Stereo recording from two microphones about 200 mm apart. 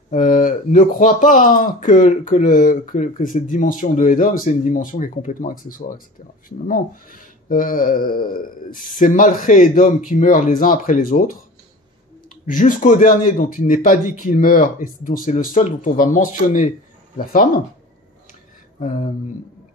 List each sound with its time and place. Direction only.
0.1 s speech: 40° left (ahead or behind)
12.4 s speech: 40° left (ahead or behind)
18.8 s speech: 45° left (ahead or behind)